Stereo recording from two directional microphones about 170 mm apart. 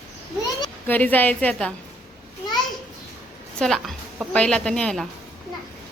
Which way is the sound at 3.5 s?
5° left (ahead or behind).